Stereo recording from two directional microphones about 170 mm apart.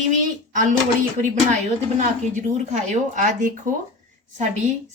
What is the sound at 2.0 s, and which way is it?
A woman's voice, 45° right (ahead or behind).